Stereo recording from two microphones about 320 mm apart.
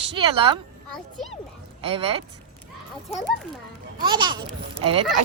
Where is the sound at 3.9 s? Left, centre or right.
Centre.